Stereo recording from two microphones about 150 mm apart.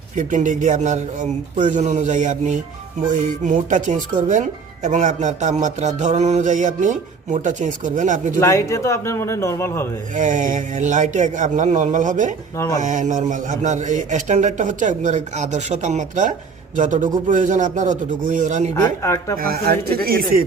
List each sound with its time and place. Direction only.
0.2 s speech: 55° right (ahead or behind)
8.4 s speech: 20° left (ahead or behind)
10.2 s speech: 55° right (ahead or behind)
19.0 s speech: 15° left (ahead or behind)
19.4 s speech: 85° right